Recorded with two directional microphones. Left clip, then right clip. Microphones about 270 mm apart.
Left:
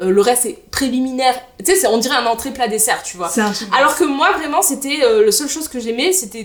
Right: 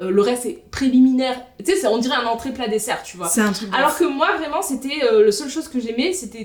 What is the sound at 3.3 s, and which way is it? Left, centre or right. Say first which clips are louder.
Speech: left 2 dB; left.